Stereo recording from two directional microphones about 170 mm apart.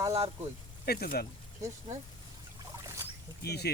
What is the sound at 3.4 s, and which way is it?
Speech, 70° left (ahead or behind).